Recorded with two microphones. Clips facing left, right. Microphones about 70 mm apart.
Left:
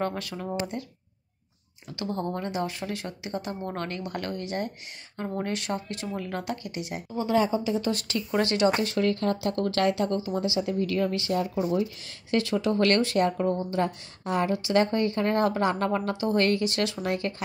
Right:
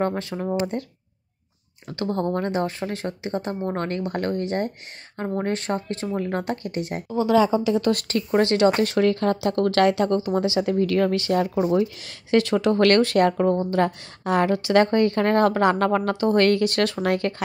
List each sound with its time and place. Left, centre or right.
0.0 s speech: right
0.6 s speech: right
1.9 s speech: right
7.1 s a woman's voice: right
8.3 s speech: right
8.7 s speech: right
12.3 s speech: right